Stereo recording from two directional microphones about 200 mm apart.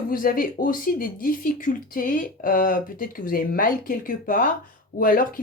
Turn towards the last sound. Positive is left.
turn(degrees=45)  # may be behind; listen again after turning